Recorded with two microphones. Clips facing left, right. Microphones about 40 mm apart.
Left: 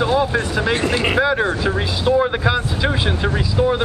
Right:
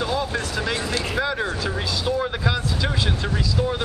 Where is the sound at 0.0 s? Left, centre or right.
Left.